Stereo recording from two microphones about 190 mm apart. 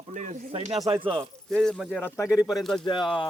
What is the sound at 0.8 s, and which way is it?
Speech, 15° right (ahead or behind).